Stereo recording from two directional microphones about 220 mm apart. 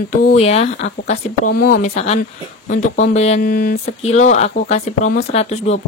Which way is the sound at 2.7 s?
35° left (ahead or behind).